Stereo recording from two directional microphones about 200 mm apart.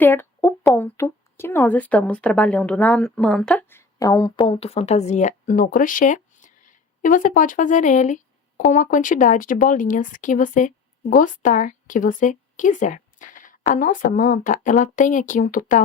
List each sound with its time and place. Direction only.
0.0 s speech: 10° left (ahead or behind); by 15.8 s 40° left (ahead or behind)